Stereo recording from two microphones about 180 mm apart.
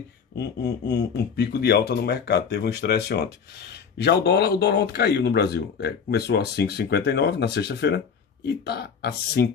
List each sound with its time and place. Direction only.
0.4 s speech: 65° left (ahead or behind)